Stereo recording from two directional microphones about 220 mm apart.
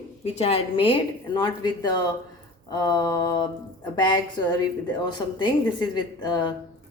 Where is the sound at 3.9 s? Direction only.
20° left (ahead or behind).